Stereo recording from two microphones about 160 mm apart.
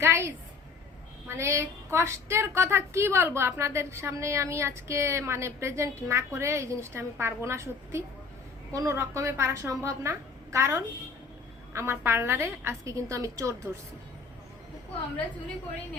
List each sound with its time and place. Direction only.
0.0 s a woman's voice: 15° right (ahead or behind)
1.4 s a woman's voice: 15° right (ahead or behind)